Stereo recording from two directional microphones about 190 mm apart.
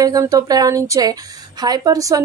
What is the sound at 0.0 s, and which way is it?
A woman's voice, 20° right (ahead or behind).